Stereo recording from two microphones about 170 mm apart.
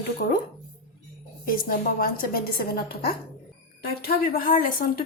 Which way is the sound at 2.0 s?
60° left (ahead or behind).